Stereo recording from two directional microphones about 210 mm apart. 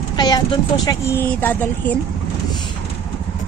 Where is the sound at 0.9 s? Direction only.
10° left (ahead or behind).